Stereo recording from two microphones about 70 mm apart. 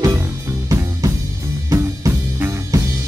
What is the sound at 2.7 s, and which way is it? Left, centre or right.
Drum kit, right.